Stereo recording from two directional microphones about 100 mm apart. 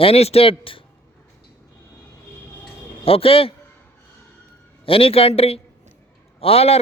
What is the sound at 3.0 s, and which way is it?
Speech, 70° left (ahead or behind).